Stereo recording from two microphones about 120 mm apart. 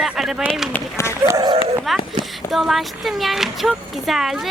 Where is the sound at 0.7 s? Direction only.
20° left (ahead or behind).